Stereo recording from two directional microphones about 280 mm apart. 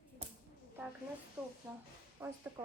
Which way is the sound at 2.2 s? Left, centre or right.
Centre.